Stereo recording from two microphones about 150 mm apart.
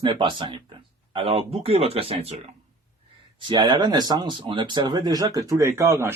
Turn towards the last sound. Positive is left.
turn(degrees=-20)  # may be behind; listen again after turning